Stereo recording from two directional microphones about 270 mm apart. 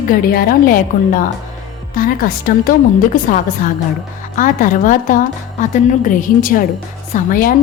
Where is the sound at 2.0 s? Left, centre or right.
Left.